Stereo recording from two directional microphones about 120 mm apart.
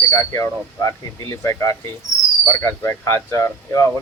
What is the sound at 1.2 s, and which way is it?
Speech, 25° left (ahead or behind).